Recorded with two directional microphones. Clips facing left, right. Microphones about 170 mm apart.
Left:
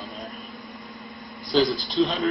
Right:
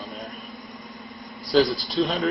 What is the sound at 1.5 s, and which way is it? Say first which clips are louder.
Speech: right 1 dB; centre (ahead or behind).